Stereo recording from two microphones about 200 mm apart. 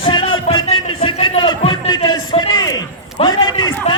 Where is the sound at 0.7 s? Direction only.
25° left (ahead or behind).